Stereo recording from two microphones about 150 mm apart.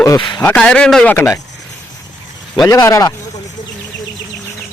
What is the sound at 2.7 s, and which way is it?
Speech, 20° left (ahead or behind).